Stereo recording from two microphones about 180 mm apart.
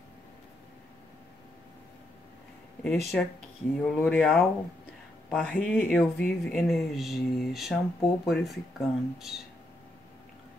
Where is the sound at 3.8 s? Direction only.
5° left (ahead or behind).